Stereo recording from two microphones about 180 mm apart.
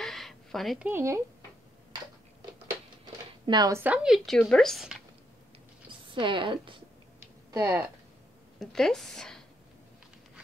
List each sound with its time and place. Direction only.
0.0 s a sound: centre (ahead or behind)
0.8 s speech: 15° right (ahead or behind)
3.4 s a woman's voice: 20° right (ahead or behind); by 4.9 s centre (ahead or behind)
5.9 s a woman's voice: 25° right (ahead or behind)
7.5 s speech: 15° right (ahead or behind)
8.5 s a woman's voice: centre (ahead or behind)